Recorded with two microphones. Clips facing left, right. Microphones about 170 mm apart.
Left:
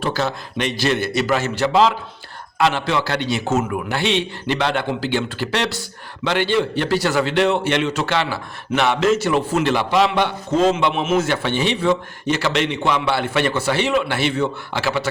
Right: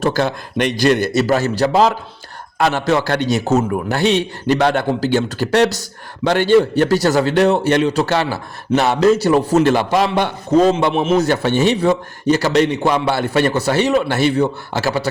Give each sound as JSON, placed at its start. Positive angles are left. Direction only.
{"t": 0.0, "sound": "a man's voice", "side_deg": -50}